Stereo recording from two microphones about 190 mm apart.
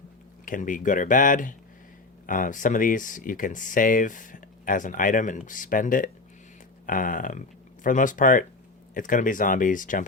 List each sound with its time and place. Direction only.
0.4 s speech: 45° left (ahead or behind)